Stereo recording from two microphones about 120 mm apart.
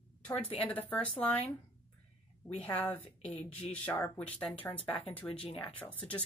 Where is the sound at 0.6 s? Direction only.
15° left (ahead or behind).